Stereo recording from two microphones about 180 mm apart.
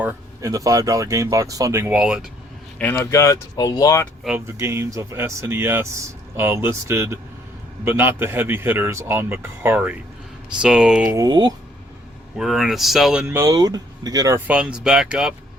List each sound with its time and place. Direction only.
0.0 s speech: 15° right (ahead or behind)
2.7 s speech: 10° left (ahead or behind)
4.2 s speech: 5° right (ahead or behind)
4.4 s speech: 15° right (ahead or behind)
11.2 s speech: 20° right (ahead or behind)
12.4 s speech: centre (ahead or behind)
13.2 s speech: 15° right (ahead or behind)